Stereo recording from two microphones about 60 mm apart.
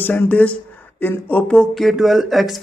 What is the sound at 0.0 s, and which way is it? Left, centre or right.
A man's voice, left.